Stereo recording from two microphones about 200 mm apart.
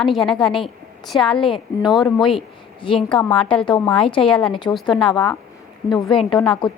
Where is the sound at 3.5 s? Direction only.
5° left (ahead or behind).